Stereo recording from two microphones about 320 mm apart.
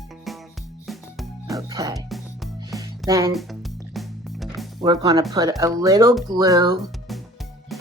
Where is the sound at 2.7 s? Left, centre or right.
Centre.